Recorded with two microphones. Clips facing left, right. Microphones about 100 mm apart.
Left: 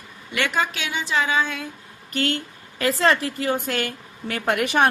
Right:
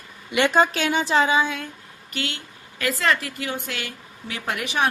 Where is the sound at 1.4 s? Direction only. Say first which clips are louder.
Right 1 dB; centre (ahead or behind).